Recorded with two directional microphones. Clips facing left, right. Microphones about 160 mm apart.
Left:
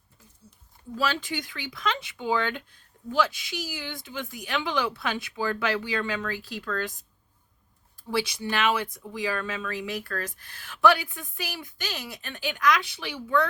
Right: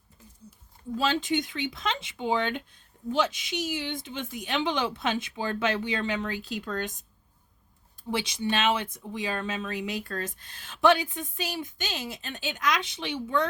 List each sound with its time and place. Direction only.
0.9 s speech: 25° right (ahead or behind)
8.1 s speech: 20° right (ahead or behind)